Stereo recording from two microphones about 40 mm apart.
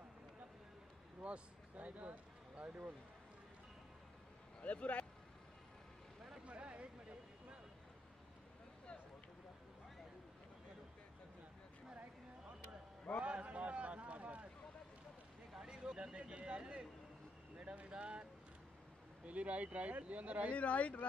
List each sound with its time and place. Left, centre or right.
1.2 s speech: right
4.6 s speech: left
6.4 s a sound: right
13.2 s a sound: right
15.6 s speech: centre
19.2 s speech: right
20.5 s speech: left